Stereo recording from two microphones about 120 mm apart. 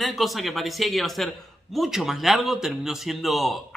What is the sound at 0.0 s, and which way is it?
A man's voice, centre (ahead or behind).